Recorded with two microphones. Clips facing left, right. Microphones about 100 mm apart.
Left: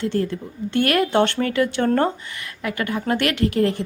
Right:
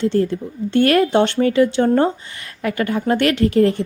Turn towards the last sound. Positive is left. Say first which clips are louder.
# right 5 dB
turn(degrees=-30)  # may be behind; listen again after turning